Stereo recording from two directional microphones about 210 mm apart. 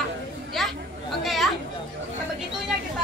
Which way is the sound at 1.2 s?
Centre (ahead or behind).